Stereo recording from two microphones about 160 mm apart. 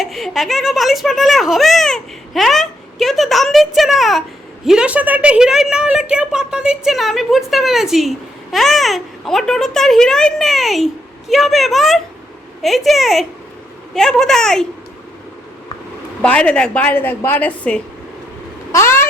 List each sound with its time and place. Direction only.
0.0 s a child's voice: centre (ahead or behind)
16.2 s a woman's voice: 5° left (ahead or behind)
18.7 s meow: 15° left (ahead or behind)